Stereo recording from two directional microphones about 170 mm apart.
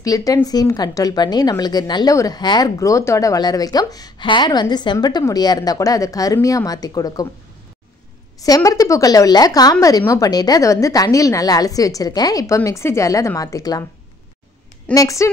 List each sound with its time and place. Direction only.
0.0 s a woman's voice: 20° left (ahead or behind)
8.4 s a woman's voice: 20° left (ahead or behind)
15.0 s a woman's voice: 20° left (ahead or behind)